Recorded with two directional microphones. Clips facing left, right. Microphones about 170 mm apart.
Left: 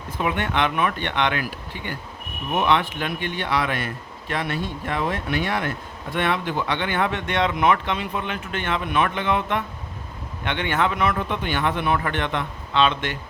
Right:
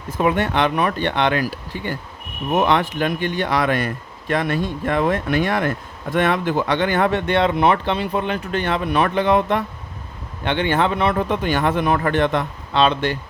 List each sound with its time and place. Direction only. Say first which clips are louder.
0.2 s speech: right 5 dB; 40° right (ahead or behind)